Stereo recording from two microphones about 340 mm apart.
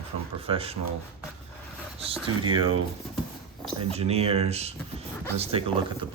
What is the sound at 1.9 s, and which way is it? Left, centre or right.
Speech, centre.